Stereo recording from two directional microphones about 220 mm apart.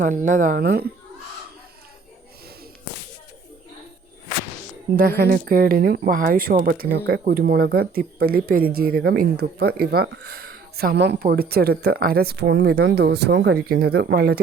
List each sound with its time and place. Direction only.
0.0 s speech: 35° right (ahead or behind)
4.9 s speech: 40° right (ahead or behind)